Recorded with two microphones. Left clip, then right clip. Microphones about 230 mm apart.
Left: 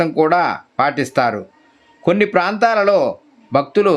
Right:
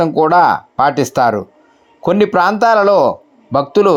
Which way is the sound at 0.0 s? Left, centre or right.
Centre.